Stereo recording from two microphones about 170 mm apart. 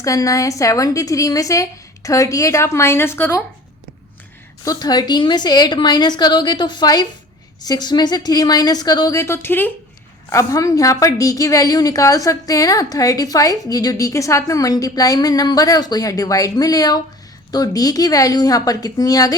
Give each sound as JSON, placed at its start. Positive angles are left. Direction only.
{"t": 0.0, "sound": "a woman's voice", "side_deg": 20}
{"t": 4.6, "sound": "a woman's voice", "side_deg": 20}